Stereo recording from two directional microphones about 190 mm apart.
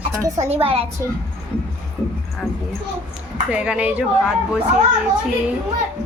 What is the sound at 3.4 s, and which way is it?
Speech, 5° right (ahead or behind).